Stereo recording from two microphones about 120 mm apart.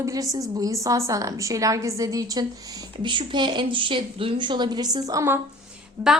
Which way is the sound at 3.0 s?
45° right (ahead or behind).